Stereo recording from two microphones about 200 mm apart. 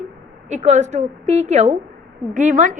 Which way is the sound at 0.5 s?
35° right (ahead or behind).